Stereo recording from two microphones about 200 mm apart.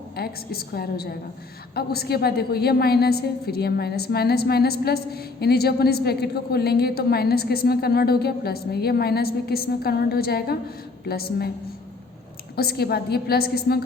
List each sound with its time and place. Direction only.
0.2 s a woman's voice: 50° left (ahead or behind)
12.5 s a woman's voice: 50° left (ahead or behind)